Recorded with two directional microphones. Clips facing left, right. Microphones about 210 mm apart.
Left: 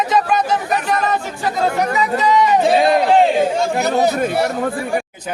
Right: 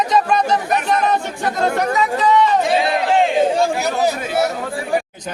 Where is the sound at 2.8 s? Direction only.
45° left (ahead or behind).